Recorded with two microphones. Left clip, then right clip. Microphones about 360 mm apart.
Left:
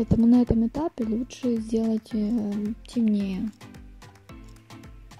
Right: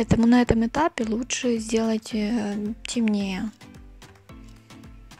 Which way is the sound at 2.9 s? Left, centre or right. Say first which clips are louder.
Right 1 dB; centre.